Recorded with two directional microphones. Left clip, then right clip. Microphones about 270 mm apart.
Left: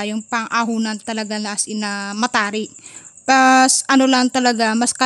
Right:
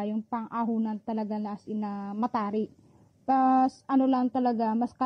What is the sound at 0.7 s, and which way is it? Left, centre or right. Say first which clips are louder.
Speech: left 9 dB; centre.